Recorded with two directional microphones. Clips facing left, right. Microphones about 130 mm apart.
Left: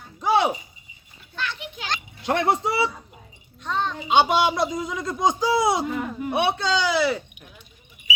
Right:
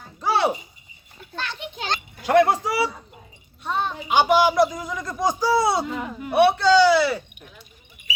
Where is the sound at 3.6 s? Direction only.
10° right (ahead or behind).